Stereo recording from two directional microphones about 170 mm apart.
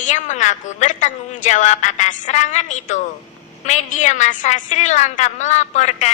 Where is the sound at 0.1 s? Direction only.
45° left (ahead or behind).